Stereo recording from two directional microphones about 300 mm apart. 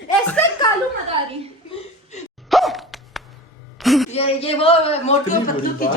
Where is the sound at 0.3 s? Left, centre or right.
Centre.